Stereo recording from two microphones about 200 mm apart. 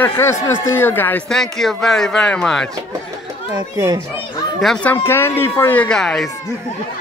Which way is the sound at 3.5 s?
20° right (ahead or behind).